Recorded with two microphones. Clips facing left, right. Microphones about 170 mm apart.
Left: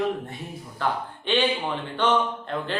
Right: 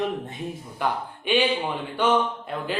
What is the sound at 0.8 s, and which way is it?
Speech, 10° right (ahead or behind).